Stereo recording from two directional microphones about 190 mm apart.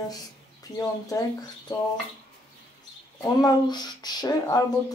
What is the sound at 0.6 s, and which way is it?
Speech, 20° left (ahead or behind).